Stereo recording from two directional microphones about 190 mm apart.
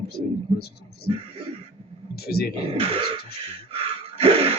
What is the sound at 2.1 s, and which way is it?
Speech, 55° left (ahead or behind).